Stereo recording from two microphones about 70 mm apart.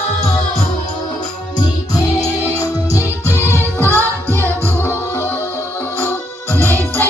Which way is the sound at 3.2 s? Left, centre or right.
Left.